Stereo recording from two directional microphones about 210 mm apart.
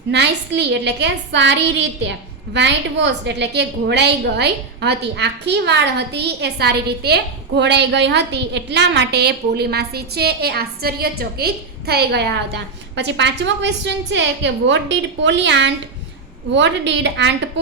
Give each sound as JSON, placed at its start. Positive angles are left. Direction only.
{"t": 0.1, "sound": "a woman's voice", "side_deg": -55}